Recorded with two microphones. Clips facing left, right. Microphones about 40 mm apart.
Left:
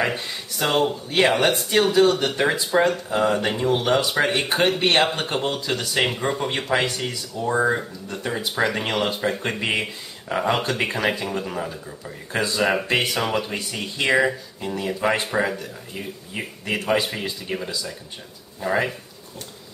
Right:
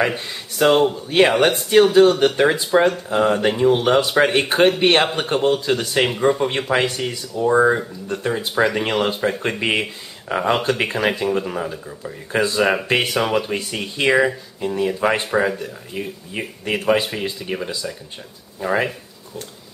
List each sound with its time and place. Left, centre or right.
0.0 s speech: centre
2.4 s speech: centre
4.5 s speech: centre
13.7 s speech: right
14.0 s speech: centre